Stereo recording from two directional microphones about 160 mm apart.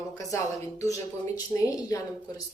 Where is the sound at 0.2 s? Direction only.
20° left (ahead or behind).